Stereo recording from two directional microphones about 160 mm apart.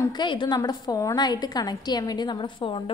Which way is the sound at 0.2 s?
30° left (ahead or behind).